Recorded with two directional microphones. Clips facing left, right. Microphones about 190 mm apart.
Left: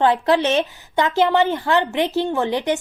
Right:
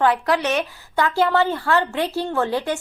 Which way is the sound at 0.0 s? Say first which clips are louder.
Left 3 dB; 25° left (ahead or behind).